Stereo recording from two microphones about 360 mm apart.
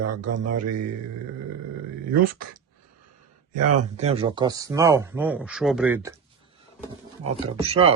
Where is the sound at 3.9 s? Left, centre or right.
Centre.